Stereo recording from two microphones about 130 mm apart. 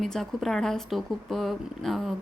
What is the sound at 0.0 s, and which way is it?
A woman's voice, centre (ahead or behind).